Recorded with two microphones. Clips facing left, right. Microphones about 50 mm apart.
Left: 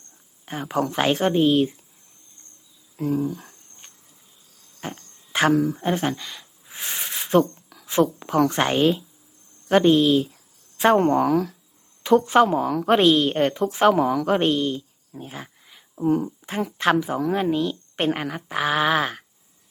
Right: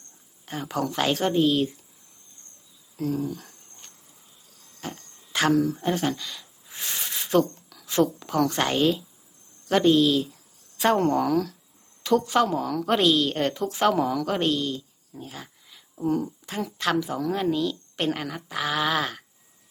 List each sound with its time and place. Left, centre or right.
0.4 s a woman's voice: left
2.9 s a sound: centre
9.6 s a woman's voice: left